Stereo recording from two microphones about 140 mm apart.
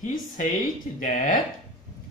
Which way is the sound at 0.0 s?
65° left (ahead or behind).